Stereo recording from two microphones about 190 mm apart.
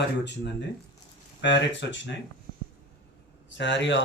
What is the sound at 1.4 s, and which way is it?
Speech, 70° left (ahead or behind).